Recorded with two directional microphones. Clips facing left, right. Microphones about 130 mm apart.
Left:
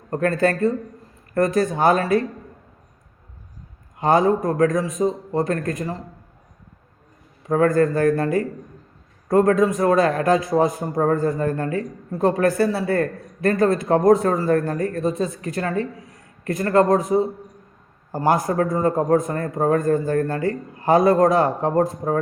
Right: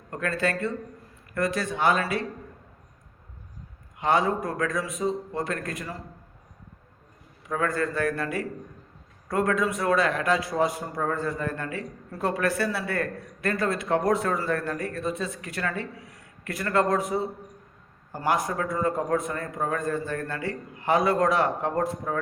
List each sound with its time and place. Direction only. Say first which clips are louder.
0.1 s speech: left 8 dB; 40° left (ahead or behind)
3.9 s a man's voice: left 6 dB; 40° left (ahead or behind)
7.4 s a man's voice: left 10 dB; 40° left (ahead or behind)